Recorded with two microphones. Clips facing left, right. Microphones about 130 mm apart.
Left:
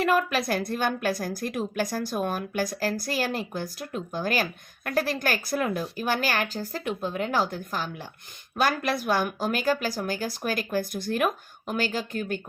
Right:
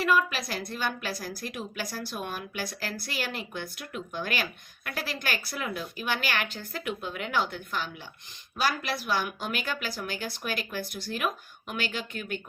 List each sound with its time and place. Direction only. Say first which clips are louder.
0.0 s a woman's voice: left 3 dB; 55° left (ahead or behind)
8.5 s a woman's voice: left 4 dB; 50° left (ahead or behind)
11.6 s a woman's voice: left 6 dB; 40° left (ahead or behind)